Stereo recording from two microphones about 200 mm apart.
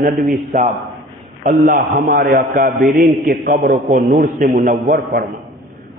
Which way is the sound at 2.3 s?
40° right (ahead or behind).